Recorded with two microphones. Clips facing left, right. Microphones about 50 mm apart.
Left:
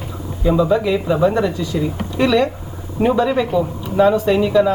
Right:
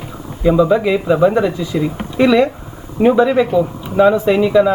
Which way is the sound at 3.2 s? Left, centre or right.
Centre.